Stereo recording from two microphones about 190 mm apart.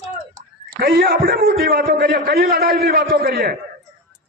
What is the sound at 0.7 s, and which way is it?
A man's voice, 50° right (ahead or behind).